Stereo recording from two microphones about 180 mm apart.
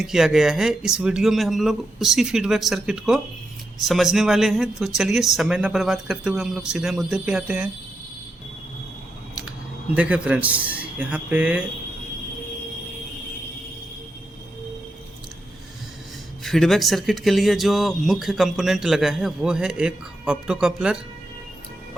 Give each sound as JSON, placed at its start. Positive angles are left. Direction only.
{"t": 0.0, "sound": "speech", "side_deg": -5}
{"t": 9.9, "sound": "speech", "side_deg": -5}
{"t": 16.4, "sound": "speech", "side_deg": 0}